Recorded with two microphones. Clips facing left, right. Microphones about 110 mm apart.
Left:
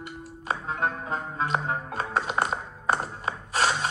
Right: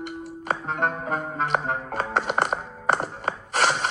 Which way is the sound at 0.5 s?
55° right (ahead or behind).